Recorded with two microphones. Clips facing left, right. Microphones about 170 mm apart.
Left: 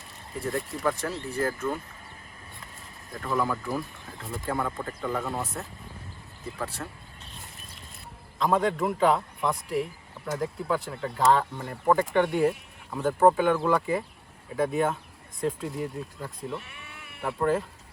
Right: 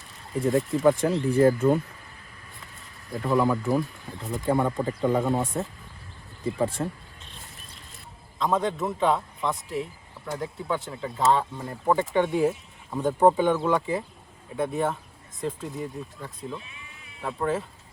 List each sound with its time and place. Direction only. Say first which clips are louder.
0.4 s speech: right 8 dB; 20° right (ahead or behind)
3.1 s speech: right 5 dB; 25° right (ahead or behind)
6.8 s speech: right 8 dB; 25° right (ahead or behind)
8.4 s speech: left 1 dB; centre (ahead or behind)
13.0 s speech: right 1 dB; 15° right (ahead or behind)
13.5 s speech: even; centre (ahead or behind)
16.6 s sheep: left 2 dB; 70° left (ahead or behind)
17.2 s speech: left 2 dB; centre (ahead or behind)